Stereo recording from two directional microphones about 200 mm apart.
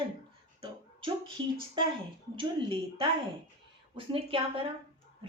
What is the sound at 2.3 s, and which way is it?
A woman's voice, 25° right (ahead or behind).